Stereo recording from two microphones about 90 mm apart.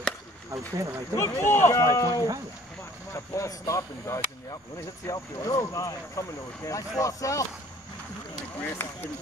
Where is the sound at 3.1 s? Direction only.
35° left (ahead or behind).